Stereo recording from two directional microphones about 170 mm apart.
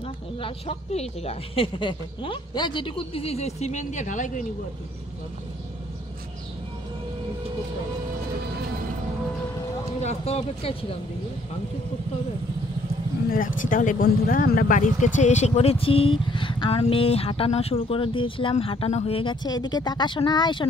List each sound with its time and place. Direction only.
0.4 s speech: 35° left (ahead or behind)
9.9 s speech: 40° left (ahead or behind)
13.3 s speech: 55° left (ahead or behind); by 20.6 s 25° left (ahead or behind)